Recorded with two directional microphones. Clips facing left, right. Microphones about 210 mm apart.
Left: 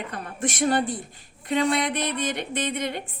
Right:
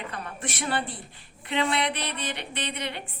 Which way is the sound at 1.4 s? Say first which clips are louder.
Left 4 dB; 45° left (ahead or behind).